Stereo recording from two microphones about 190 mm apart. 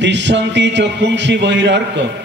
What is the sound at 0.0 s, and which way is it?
A man's voice, 70° right (ahead or behind).